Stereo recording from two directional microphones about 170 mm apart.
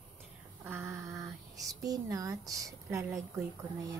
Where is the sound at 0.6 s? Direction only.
15° right (ahead or behind).